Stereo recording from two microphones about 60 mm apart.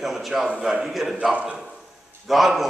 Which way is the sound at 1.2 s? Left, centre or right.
Centre.